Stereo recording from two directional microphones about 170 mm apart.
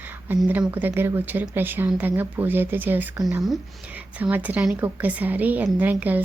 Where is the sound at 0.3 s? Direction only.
5° right (ahead or behind).